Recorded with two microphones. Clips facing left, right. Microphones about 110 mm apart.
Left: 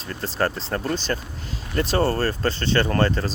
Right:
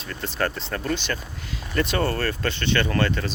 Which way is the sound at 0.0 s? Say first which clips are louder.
Left 2 dB; 35° left (ahead or behind).